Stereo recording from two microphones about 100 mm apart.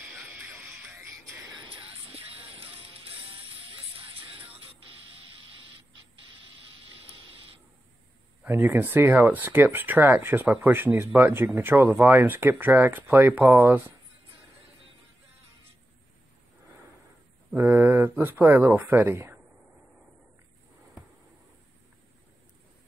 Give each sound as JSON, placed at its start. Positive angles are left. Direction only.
{"t": 0.1, "sound": "music", "side_deg": -20}
{"t": 1.9, "sound": "music", "side_deg": -70}
{"t": 8.5, "sound": "speech", "side_deg": -20}
{"t": 17.6, "sound": "speech", "side_deg": -20}